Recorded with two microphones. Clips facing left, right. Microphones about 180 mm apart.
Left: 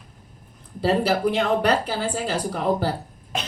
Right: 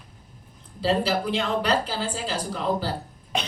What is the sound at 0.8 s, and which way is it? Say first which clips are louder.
Speech: left 3 dB; 55° left (ahead or behind).